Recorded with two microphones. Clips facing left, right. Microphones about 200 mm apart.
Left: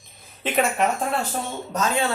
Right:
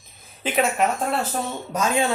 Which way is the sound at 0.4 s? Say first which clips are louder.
Right 1 dB; centre (ahead or behind).